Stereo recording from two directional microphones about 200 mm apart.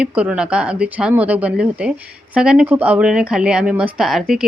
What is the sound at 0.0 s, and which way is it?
Speech, 5° right (ahead or behind).